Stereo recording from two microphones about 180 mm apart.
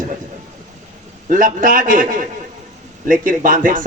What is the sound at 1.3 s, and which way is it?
A man's voice, 50° right (ahead or behind).